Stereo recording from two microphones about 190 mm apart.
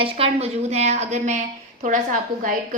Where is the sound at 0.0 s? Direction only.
30° right (ahead or behind).